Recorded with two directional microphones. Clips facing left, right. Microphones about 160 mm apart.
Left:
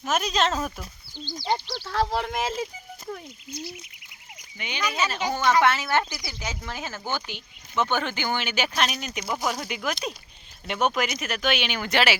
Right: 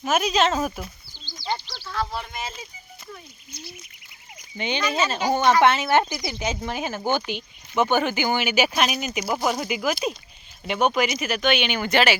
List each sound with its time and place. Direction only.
0.0 s speech: 5° right (ahead or behind)
1.2 s a sound: 55° left (ahead or behind)
1.6 s speech: 60° left (ahead or behind); by 2.6 s 90° left
3.5 s bird: 90° left
4.5 s speech: 30° right (ahead or behind); by 12.1 s centre (ahead or behind)